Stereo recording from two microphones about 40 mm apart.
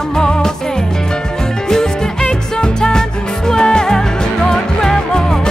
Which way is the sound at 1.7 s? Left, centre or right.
Centre.